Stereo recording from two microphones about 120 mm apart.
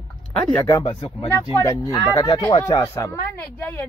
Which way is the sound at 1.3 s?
25° left (ahead or behind).